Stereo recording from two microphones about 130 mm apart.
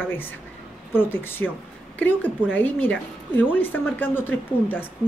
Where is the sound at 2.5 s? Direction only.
15° left (ahead or behind).